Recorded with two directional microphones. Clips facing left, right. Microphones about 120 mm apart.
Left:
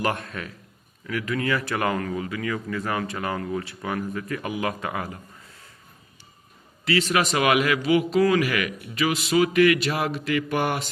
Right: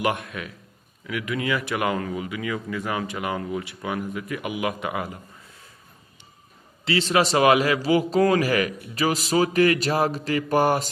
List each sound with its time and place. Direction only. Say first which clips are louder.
0.0 s a man's voice: right 1 dB; 10° right (ahead or behind)
6.8 s a man's voice: right 1 dB; 30° right (ahead or behind)